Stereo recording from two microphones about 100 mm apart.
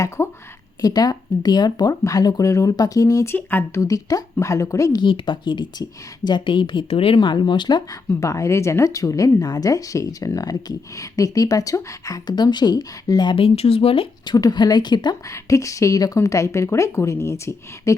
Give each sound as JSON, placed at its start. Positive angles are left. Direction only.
{"t": 0.2, "sound": "a woman's voice", "side_deg": 25}
{"t": 0.8, "sound": "a woman's voice", "side_deg": 40}
{"t": 4.9, "sound": "a woman's voice", "side_deg": 55}
{"t": 7.2, "sound": "a woman's voice", "side_deg": 50}
{"t": 8.1, "sound": "a woman's voice", "side_deg": 30}
{"t": 13.3, "sound": "speech", "side_deg": 70}
{"t": 14.3, "sound": "a woman's voice", "side_deg": 45}
{"t": 15.3, "sound": "a woman's voice", "side_deg": 30}